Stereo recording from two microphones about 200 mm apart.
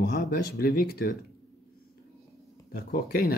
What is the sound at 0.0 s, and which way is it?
Speech, 50° left (ahead or behind).